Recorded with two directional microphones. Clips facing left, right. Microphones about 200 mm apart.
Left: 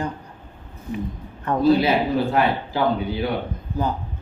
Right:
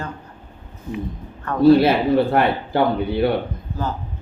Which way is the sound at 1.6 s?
60° right (ahead or behind).